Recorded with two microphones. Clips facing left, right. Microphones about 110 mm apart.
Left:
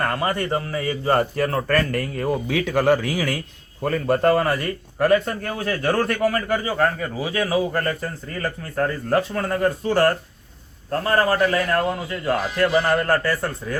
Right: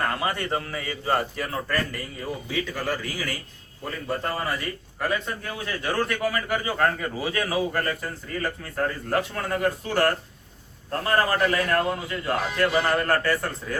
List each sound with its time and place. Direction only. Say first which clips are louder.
0.2 s a man's voice: left 4 dB; 35° left (ahead or behind); by 3.4 s 90° left
3.8 s a man's voice: left 11 dB; 65° left (ahead or behind); by 6.4 s 50° left (ahead or behind)
7.2 s a man's voice: left 5 dB; 25° left (ahead or behind)